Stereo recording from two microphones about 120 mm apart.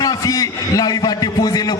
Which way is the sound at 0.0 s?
30° left (ahead or behind).